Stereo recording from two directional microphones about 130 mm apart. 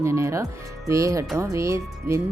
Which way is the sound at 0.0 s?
20° right (ahead or behind).